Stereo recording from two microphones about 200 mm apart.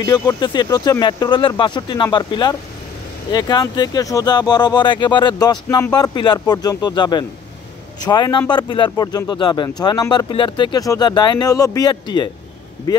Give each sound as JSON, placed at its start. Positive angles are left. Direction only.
{"t": 0.0, "sound": "speech", "side_deg": 20}